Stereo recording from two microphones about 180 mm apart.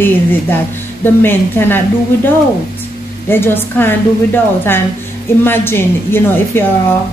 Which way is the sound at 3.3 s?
10° left (ahead or behind).